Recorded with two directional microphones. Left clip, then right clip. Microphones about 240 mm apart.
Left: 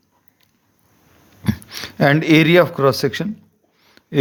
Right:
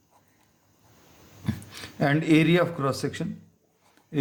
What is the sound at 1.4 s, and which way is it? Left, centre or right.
Speech, left.